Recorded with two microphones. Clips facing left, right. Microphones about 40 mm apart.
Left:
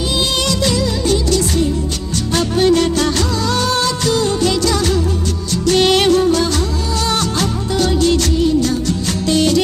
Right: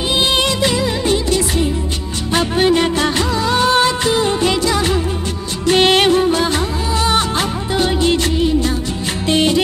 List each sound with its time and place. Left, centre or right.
0.5 s music: right
2.3 s music of bollywood: right
5.7 s music: right